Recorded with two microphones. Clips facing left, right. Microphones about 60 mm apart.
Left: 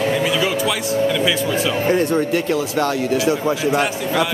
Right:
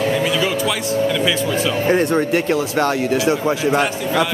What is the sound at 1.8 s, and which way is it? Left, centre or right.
Speech, right.